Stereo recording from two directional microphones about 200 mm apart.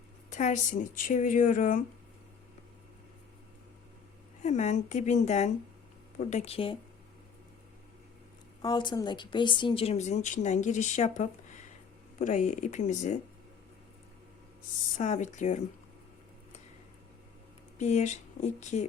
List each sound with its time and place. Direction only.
0.3 s speech: 40° left (ahead or behind)
4.4 s speech: 35° left (ahead or behind)
8.6 s speech: 20° left (ahead or behind)
14.9 s speech: 35° left (ahead or behind)
17.7 s speech: 35° left (ahead or behind)